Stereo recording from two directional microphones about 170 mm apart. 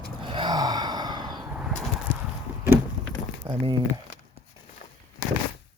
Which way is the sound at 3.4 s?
30° right (ahead or behind).